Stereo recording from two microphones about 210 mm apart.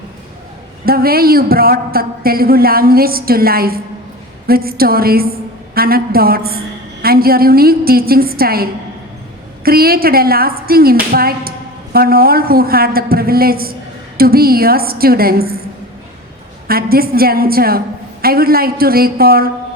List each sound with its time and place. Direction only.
0.9 s a man's voice: 45° right (ahead or behind)
16.6 s a man's voice: 45° right (ahead or behind)